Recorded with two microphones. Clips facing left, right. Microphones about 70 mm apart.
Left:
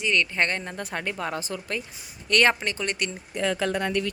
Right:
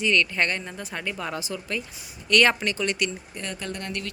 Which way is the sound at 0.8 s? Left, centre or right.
Left.